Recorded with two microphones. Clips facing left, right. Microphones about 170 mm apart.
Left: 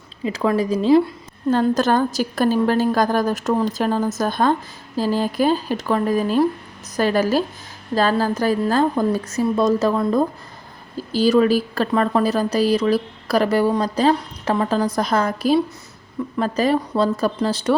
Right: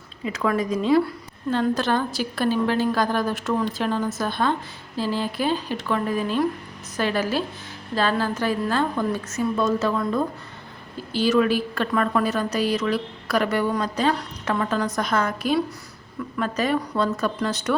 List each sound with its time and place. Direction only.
0.3 s a woman's voice: 30° left (ahead or behind)
1.5 s a woman's voice: 45° left (ahead or behind)